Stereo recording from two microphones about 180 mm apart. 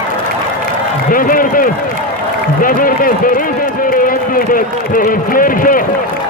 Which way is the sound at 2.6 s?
50° left (ahead or behind).